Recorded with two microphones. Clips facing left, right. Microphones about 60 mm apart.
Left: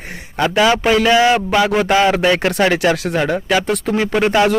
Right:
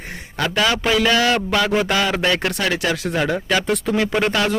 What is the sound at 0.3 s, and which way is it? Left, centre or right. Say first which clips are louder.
A man's voice: left 5 dB; centre.